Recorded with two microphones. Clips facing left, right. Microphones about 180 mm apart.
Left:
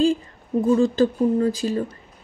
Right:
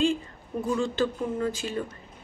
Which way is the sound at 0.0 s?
35° left (ahead or behind).